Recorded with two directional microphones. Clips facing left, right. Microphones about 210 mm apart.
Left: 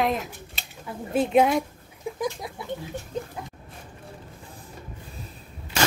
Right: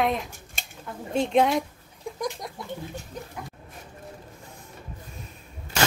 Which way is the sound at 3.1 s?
25° left (ahead or behind).